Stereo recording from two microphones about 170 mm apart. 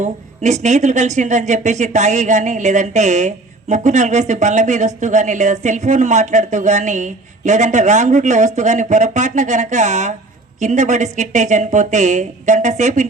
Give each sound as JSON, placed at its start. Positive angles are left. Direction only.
{"t": 0.0, "sound": "speech", "side_deg": -45}